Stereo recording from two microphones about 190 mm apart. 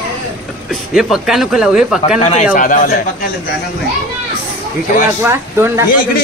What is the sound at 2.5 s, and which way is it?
Speech, 40° left (ahead or behind).